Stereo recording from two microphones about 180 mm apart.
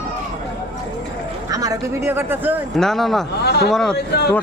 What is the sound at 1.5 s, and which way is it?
Speech, 20° right (ahead or behind).